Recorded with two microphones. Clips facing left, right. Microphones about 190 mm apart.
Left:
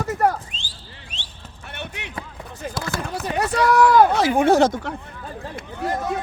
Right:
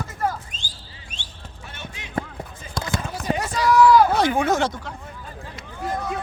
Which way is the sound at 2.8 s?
5° left (ahead or behind).